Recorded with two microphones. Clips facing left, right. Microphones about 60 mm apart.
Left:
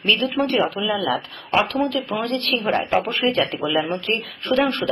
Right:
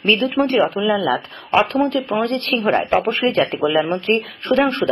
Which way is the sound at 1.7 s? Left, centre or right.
Right.